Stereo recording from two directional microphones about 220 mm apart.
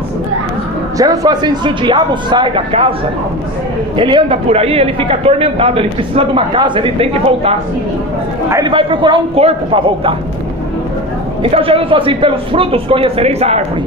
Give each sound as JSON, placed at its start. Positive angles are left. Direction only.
{"t": 0.9, "sound": "a man's voice", "side_deg": -15}
{"t": 4.0, "sound": "a man's voice", "side_deg": -25}
{"t": 11.5, "sound": "a man's voice", "side_deg": -25}